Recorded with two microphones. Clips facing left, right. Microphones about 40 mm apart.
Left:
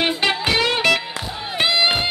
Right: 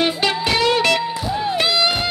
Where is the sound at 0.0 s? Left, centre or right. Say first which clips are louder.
Right 1 dB; left.